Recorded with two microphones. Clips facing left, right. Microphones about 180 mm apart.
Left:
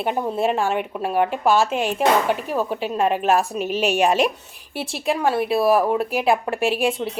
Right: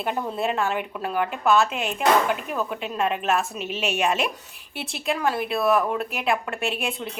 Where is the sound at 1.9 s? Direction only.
30° left (ahead or behind).